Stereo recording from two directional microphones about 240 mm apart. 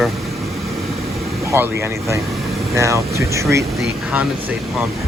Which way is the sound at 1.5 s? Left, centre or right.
Centre.